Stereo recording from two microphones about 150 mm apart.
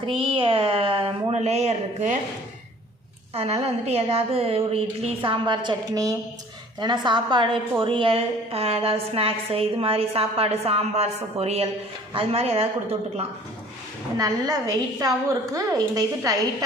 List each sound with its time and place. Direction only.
0.0 s a woman's voice: 35° right (ahead or behind)
3.3 s a woman's voice: 45° right (ahead or behind)
14.2 s a woman's voice: 20° right (ahead or behind)